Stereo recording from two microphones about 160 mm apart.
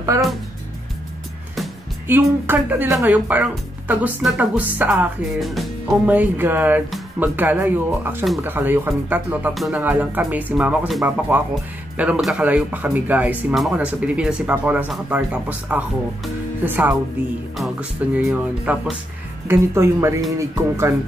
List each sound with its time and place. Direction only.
2.0 s speech: 10° right (ahead or behind)
6.0 s speech: 10° right (ahead or behind)
9.5 s speech: centre (ahead or behind)
9.8 s speech: 10° right (ahead or behind)